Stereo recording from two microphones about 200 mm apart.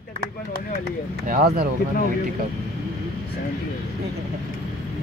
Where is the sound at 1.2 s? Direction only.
45° right (ahead or behind).